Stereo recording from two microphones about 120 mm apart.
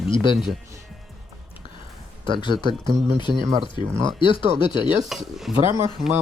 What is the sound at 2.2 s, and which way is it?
Speech, 40° left (ahead or behind).